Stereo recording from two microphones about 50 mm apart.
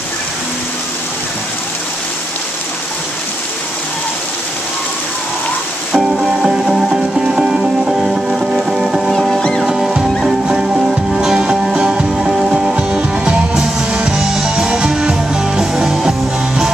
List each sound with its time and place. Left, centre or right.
5.9 s music: centre
9.1 s music: centre
9.6 s music: centre